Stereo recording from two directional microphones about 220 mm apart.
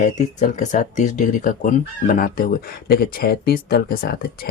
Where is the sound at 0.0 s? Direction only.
35° left (ahead or behind).